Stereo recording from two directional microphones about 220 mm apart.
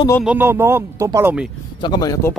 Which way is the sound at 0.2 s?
5° right (ahead or behind).